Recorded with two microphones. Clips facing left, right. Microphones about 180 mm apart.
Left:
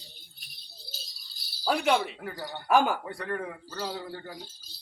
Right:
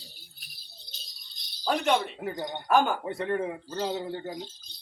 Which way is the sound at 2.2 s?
20° right (ahead or behind).